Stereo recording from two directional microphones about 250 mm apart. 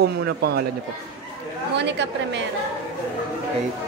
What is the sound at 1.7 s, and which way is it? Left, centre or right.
Speech, right.